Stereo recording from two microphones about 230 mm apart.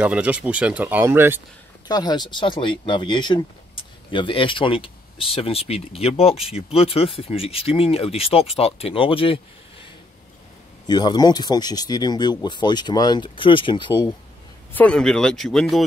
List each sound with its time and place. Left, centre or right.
0.0 s speech: centre
1.9 s speech: centre
10.9 s speech: centre
14.7 s speech: centre